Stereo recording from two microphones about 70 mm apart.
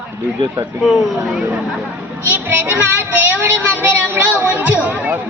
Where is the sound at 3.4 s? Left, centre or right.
Right.